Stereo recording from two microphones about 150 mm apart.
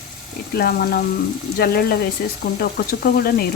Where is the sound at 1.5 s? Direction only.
90° left.